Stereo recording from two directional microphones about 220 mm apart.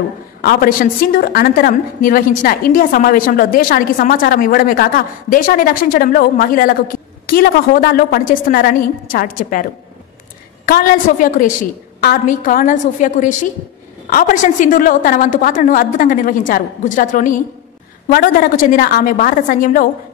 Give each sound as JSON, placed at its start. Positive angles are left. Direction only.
{"t": 0.4, "sound": "a woman's voice", "side_deg": 45}